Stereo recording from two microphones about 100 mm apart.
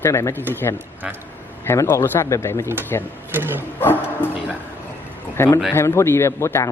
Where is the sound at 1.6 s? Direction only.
25° left (ahead or behind).